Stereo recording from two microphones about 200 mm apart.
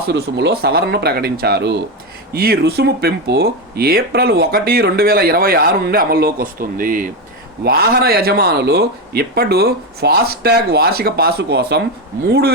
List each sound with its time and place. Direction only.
0.0 s speech: 55° right (ahead or behind)